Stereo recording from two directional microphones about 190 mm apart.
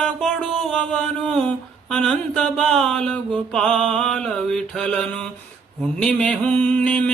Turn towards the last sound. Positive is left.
turn(degrees=5)  # may be behind; listen again after turning